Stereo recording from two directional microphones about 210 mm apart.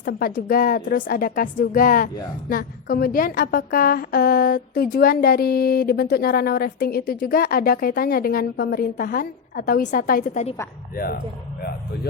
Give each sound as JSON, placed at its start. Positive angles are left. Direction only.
{"t": 0.0, "sound": "a woman's voice", "side_deg": 45}